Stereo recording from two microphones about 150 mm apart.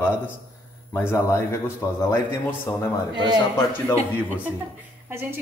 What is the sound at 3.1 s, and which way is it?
Speech, 30° right (ahead or behind).